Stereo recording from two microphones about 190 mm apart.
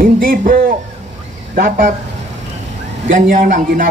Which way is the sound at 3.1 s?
45° right (ahead or behind).